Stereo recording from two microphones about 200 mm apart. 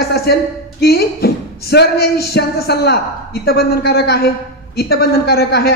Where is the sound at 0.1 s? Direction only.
50° left (ahead or behind).